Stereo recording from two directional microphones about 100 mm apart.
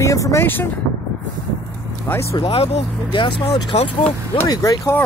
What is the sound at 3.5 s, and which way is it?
Speech, 90° left.